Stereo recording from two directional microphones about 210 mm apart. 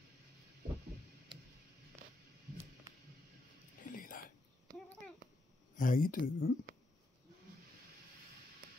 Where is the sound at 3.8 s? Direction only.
40° left (ahead or behind).